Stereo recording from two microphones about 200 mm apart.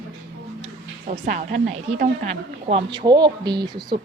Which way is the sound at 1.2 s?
40° right (ahead or behind).